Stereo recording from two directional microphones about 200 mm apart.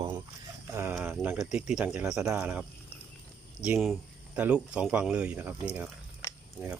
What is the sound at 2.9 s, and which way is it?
Horse, 10° left (ahead or behind).